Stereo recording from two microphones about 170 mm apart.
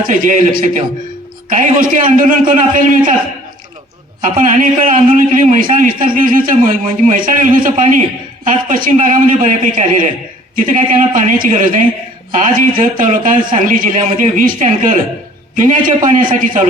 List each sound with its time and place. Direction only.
0.0 s a man's voice: 50° right (ahead or behind)
4.2 s a man's voice: 50° right (ahead or behind)